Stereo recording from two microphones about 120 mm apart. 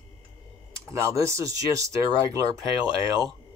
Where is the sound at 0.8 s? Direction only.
25° right (ahead or behind).